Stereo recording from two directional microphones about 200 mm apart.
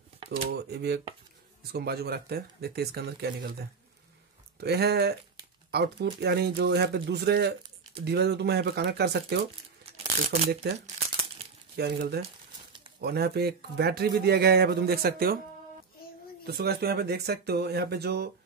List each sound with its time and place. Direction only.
0.6 s speech: 55° right (ahead or behind)
4.6 s speech: 55° right (ahead or behind)
16.4 s speech: 50° right (ahead or behind)